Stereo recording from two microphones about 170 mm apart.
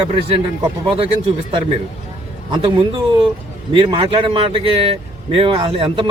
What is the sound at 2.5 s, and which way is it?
A man's voice, 30° right (ahead or behind).